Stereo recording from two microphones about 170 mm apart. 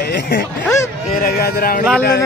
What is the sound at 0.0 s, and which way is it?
Speech, 65° left (ahead or behind).